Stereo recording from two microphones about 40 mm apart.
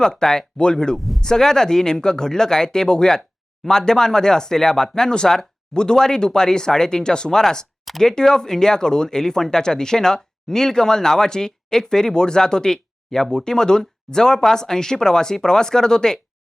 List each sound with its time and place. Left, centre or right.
0.0 s speech: centre
0.9 s speech: centre
1.2 s speech: centre